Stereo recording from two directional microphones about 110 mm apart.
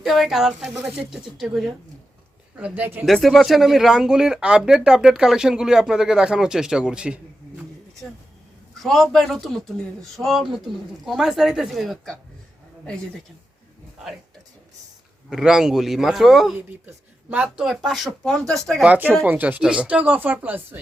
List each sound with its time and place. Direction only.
0.0 s speech: centre (ahead or behind); by 3.1 s 15° right (ahead or behind)
3.1 s speech: centre (ahead or behind)
8.8 s speech: centre (ahead or behind)
15.3 s speech: 5° right (ahead or behind)
16.6 s speech: 15° right (ahead or behind)
17.7 s speech: centre (ahead or behind)
18.9 s speech: 15° right (ahead or behind)